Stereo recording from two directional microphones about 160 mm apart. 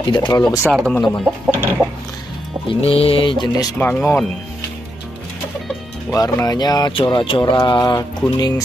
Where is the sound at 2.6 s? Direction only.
35° left (ahead or behind).